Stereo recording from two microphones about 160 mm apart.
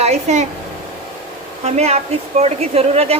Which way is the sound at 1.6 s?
40° right (ahead or behind).